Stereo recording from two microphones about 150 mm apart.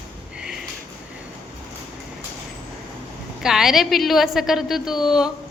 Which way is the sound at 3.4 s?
5° right (ahead or behind).